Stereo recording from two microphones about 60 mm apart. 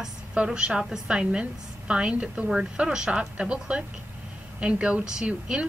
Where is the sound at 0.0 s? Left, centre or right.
Centre.